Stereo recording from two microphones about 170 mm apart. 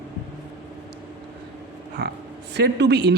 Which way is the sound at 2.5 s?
75° right (ahead or behind).